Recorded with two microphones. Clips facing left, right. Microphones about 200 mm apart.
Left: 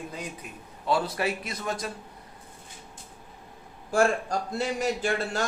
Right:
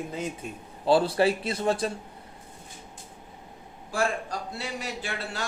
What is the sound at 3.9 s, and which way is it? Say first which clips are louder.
A man's voice: left 5 dB; 45° left (ahead or behind).